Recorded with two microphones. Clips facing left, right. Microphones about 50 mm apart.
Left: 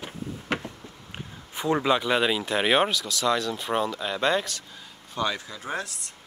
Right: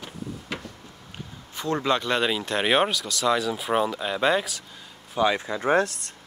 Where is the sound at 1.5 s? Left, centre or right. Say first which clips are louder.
Left 1 dB; centre.